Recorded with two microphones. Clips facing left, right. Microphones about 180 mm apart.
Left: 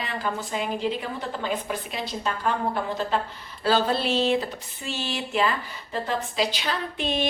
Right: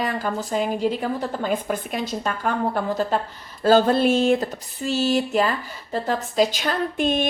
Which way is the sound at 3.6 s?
45° right (ahead or behind).